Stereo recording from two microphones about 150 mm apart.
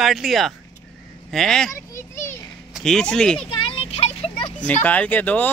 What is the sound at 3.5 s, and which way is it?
Vehicle, 40° left (ahead or behind).